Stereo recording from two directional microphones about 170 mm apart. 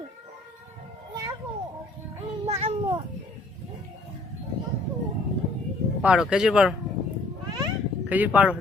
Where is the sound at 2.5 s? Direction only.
40° right (ahead or behind).